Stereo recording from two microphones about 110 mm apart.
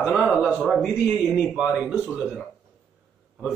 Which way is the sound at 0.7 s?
5° left (ahead or behind).